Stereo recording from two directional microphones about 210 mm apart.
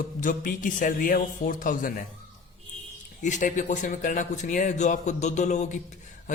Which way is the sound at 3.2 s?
35° left (ahead or behind).